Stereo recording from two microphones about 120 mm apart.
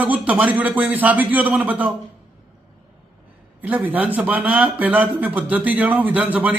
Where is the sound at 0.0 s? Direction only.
15° right (ahead or behind).